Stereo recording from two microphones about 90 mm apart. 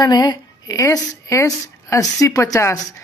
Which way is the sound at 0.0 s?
50° left (ahead or behind).